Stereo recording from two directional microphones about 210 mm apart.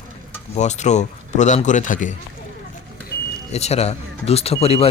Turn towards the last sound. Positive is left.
turn(degrees=30)  # may be behind; listen again after turning